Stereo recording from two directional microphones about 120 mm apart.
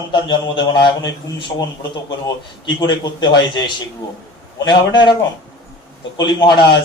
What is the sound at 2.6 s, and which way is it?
A man's voice, 40° left (ahead or behind).